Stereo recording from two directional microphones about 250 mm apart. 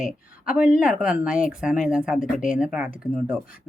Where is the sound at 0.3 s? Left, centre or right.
Centre.